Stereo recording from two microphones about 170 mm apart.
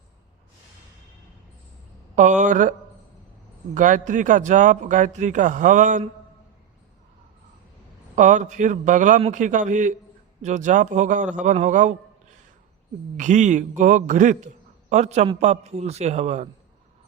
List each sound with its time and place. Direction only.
2.1 s a man's voice: 45° right (ahead or behind)
3.8 s a man's voice: 50° right (ahead or behind)
8.1 s a man's voice: 45° right (ahead or behind)
13.1 s a man's voice: 45° right (ahead or behind)